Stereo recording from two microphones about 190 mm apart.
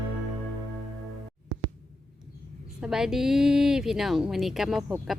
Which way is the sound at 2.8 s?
5° right (ahead or behind).